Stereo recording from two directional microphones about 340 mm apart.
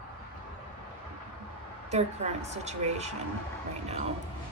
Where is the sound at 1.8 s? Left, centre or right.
Centre.